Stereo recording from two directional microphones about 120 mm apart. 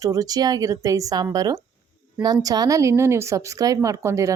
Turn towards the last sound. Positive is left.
turn(degrees=-25)  # may be behind; listen again after turning